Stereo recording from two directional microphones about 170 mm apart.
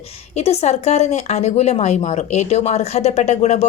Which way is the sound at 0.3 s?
40° left (ahead or behind).